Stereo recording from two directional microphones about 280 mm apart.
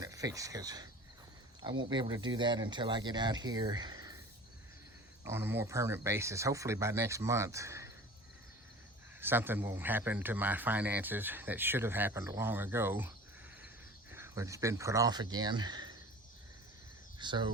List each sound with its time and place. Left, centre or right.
0.0 s speech: centre
5.2 s speech: centre
9.2 s speech: centre
17.2 s speech: centre